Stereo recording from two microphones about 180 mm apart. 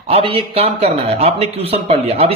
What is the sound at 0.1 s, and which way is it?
A man's voice, 30° right (ahead or behind).